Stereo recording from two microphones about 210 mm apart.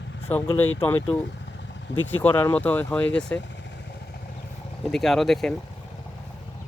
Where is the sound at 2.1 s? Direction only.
10° left (ahead or behind).